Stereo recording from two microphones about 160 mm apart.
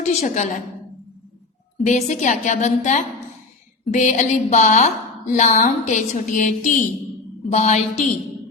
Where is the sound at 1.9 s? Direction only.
50° left (ahead or behind).